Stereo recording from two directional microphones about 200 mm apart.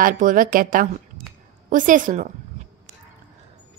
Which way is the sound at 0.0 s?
40° right (ahead or behind).